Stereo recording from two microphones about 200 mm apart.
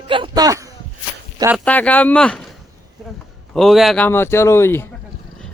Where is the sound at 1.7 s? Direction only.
10° left (ahead or behind).